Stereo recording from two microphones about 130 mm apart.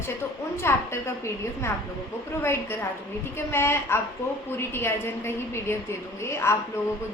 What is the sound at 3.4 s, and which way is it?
A woman's voice, 20° left (ahead or behind).